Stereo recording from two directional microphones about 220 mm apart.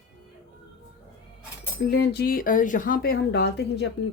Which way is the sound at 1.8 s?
50° left (ahead or behind).